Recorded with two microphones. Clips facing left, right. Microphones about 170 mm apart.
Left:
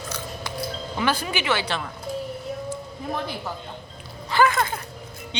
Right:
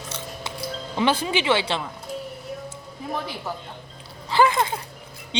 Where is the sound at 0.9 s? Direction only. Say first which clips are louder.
Right 3 dB; 25° right (ahead or behind).